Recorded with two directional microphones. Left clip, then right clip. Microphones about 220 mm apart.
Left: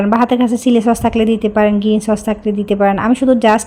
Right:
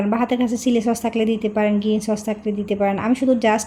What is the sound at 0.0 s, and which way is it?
Speech, 15° left (ahead or behind).